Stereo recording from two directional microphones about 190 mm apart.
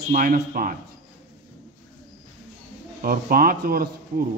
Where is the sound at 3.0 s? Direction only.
50° right (ahead or behind).